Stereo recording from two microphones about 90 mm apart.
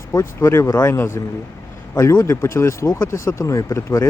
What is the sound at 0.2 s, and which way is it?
Speech, 30° left (ahead or behind).